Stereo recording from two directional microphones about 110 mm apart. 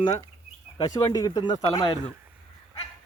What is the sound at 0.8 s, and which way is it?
Speech, 35° left (ahead or behind).